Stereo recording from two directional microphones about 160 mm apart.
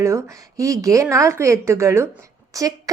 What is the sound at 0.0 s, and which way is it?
A woman's voice, 20° right (ahead or behind).